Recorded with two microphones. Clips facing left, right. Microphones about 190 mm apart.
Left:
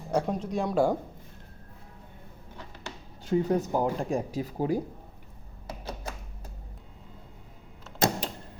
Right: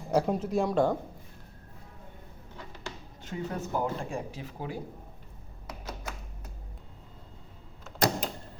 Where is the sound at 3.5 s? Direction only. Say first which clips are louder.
Left 5 dB; 15° left (ahead or behind).